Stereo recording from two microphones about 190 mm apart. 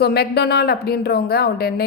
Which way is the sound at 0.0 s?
60° left (ahead or behind).